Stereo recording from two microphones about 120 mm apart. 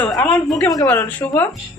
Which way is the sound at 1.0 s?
15° left (ahead or behind).